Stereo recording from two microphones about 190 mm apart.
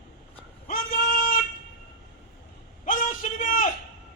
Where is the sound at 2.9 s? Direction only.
45° left (ahead or behind).